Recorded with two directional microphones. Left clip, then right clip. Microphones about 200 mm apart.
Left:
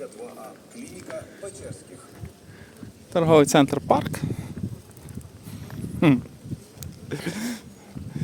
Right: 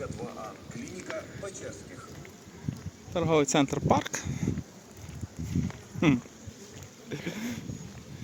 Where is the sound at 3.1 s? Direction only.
35° left (ahead or behind); by 4.5 s 20° left (ahead or behind).